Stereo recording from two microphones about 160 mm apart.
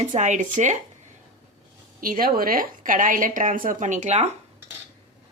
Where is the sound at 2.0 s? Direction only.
60° right (ahead or behind); by 4.3 s 45° right (ahead or behind).